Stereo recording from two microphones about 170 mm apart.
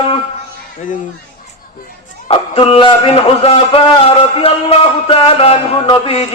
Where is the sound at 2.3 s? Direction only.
30° left (ahead or behind).